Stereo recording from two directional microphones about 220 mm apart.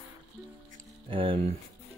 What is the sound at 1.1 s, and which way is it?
Speech, 25° right (ahead or behind).